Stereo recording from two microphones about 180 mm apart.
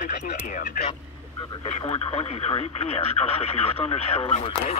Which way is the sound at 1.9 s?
30° left (ahead or behind).